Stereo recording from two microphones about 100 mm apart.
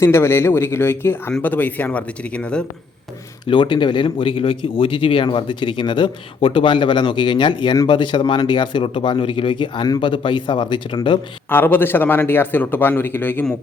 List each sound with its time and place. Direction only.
0.0 s a man's voice: 25° left (ahead or behind); by 2.6 s 10° left (ahead or behind)
3.4 s speech: 50° left (ahead or behind)
11.4 s a man's voice: 20° left (ahead or behind)